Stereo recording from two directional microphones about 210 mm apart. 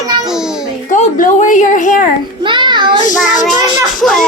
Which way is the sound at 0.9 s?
40° left (ahead or behind).